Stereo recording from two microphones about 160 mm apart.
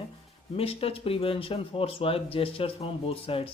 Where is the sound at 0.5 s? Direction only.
35° left (ahead or behind).